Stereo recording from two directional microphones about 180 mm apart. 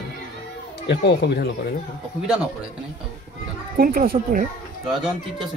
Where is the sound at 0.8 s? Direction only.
70° left (ahead or behind).